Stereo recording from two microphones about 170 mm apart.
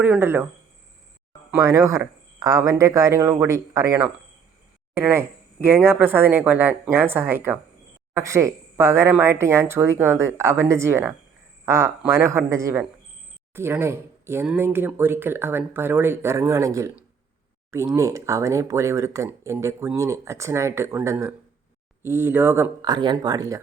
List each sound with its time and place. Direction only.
0.0 s speech: 10° right (ahead or behind)
1.5 s speech: 20° right (ahead or behind)